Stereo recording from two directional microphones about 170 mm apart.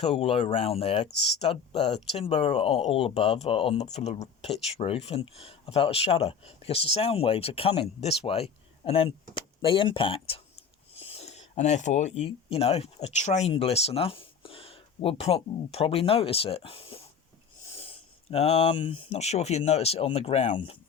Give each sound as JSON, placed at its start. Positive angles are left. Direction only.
{"t": 0.0, "sound": "speech", "side_deg": 35}